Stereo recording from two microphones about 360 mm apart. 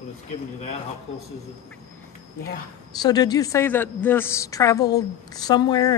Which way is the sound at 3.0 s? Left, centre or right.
Centre.